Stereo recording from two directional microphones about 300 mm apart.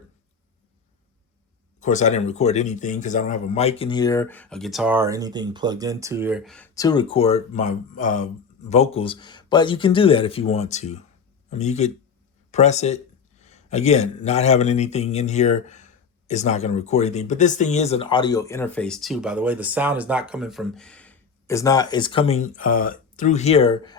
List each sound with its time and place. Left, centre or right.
1.8 s a man's voice: left